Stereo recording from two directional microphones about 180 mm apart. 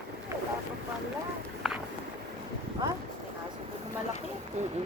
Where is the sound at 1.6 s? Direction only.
Centre (ahead or behind).